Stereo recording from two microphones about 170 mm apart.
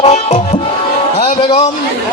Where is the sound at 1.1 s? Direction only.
40° left (ahead or behind).